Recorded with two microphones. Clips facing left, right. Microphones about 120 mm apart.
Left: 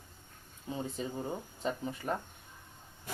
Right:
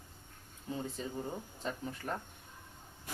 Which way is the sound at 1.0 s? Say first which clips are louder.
Left 3 dB; 15° left (ahead or behind).